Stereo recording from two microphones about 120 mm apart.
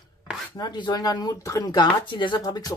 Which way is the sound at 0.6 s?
35° left (ahead or behind).